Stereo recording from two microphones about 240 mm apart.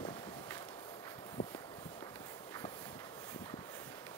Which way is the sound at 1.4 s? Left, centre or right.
Left.